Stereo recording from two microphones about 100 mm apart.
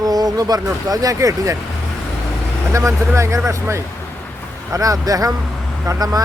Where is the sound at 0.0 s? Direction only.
40° right (ahead or behind).